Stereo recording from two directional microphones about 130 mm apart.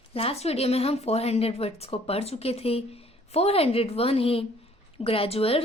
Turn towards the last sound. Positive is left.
turn(degrees=50)  # may be behind; listen again after turning